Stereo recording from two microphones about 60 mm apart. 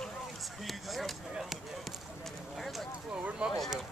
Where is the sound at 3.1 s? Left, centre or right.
Right.